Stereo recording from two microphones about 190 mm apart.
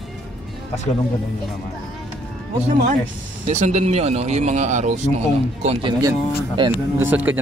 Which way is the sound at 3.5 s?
40° right (ahead or behind).